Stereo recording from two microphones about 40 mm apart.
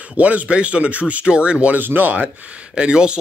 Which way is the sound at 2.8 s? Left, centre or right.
Right.